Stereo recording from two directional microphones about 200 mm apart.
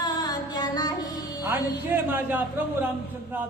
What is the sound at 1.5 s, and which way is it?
Speech, 10° right (ahead or behind).